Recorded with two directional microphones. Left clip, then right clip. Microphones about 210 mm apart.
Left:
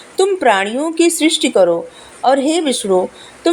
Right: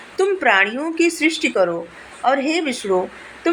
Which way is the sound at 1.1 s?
55° left (ahead or behind).